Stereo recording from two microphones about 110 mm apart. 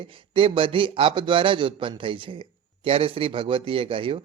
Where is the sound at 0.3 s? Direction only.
50° right (ahead or behind).